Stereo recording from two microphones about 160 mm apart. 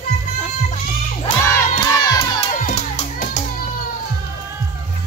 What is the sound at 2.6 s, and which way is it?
Music, 50° left (ahead or behind).